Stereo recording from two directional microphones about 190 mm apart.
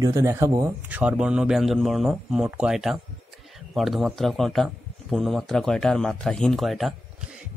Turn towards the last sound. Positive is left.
turn(degrees=0)  # may be behind; listen again after turning